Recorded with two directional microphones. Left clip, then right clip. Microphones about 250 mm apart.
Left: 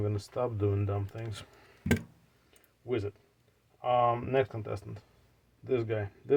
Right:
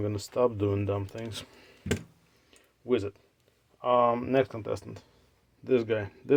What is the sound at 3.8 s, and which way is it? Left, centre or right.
Speech, right.